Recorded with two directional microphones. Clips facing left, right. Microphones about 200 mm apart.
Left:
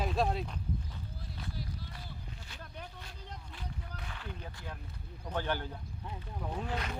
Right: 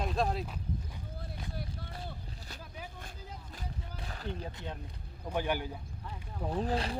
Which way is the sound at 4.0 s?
35° right (ahead or behind).